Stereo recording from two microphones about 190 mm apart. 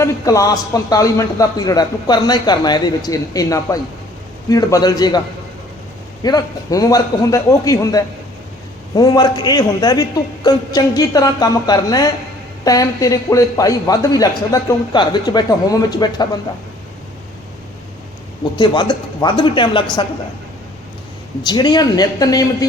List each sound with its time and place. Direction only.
0.0 s a man's voice: 15° left (ahead or behind)
6.2 s a man's voice: 20° left (ahead or behind)
18.5 s a man's voice: 25° left (ahead or behind)
21.4 s a man's voice: 25° left (ahead or behind)